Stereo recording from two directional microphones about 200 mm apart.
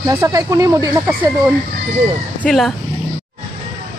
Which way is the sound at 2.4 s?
Centre (ahead or behind).